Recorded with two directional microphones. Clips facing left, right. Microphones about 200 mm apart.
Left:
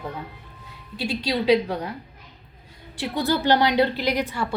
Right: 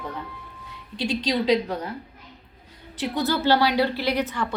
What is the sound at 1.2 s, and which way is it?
Speech, 10° left (ahead or behind).